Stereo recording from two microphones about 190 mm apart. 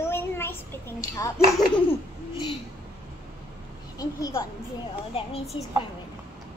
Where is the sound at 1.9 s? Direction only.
25° left (ahead or behind).